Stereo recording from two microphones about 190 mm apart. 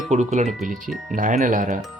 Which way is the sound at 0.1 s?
35° right (ahead or behind).